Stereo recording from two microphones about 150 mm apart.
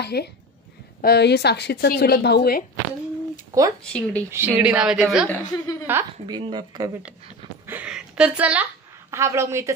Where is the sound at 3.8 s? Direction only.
5° left (ahead or behind).